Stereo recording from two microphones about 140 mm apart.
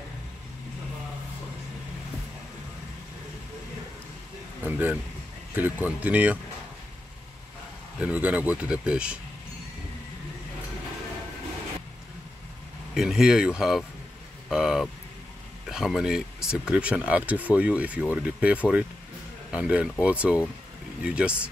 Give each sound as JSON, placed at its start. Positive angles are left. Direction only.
{"t": 4.6, "sound": "speech", "side_deg": -10}
{"t": 8.0, "sound": "speech", "side_deg": -10}
{"t": 12.9, "sound": "speech", "side_deg": -5}